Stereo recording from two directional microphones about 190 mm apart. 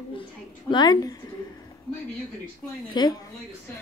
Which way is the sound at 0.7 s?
20° left (ahead or behind).